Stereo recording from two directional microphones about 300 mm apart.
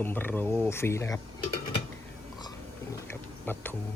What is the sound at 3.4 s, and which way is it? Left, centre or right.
Speech, centre.